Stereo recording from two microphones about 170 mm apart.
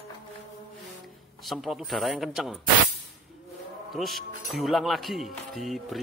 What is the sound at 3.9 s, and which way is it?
A man's voice, centre (ahead or behind).